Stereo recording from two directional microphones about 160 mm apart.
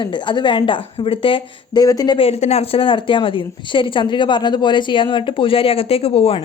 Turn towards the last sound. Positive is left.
turn(degrees=35)  # may be behind; listen again after turning